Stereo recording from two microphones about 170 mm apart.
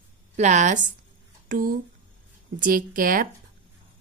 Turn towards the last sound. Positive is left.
turn(degrees=-55)  # may be behind; listen again after turning